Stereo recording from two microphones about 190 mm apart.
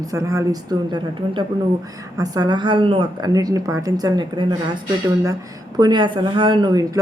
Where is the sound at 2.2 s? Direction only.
20° right (ahead or behind).